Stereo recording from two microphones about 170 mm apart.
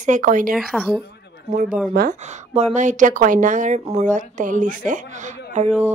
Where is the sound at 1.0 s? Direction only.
80° left.